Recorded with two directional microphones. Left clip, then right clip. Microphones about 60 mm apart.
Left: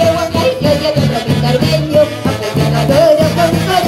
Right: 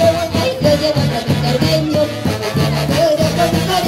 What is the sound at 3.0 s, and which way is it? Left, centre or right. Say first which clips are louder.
Music: left 5 dB; left.